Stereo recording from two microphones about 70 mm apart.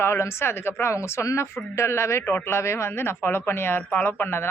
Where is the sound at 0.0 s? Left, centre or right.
Left.